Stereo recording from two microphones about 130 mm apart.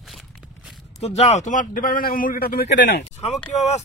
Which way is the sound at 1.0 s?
55° left (ahead or behind).